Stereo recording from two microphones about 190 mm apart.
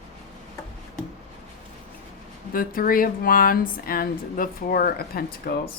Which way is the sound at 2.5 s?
50° left (ahead or behind).